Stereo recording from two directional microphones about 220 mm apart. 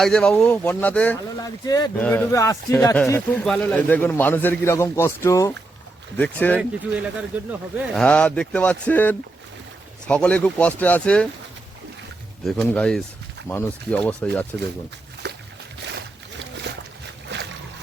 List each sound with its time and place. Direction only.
0.0 s a man's voice: 5° left (ahead or behind)
6.6 s speech: 5° right (ahead or behind)
12.5 s a man's voice: 5° left (ahead or behind)
15.2 s boat: 50° right (ahead or behind)
17.2 s boat: 50° right (ahead or behind)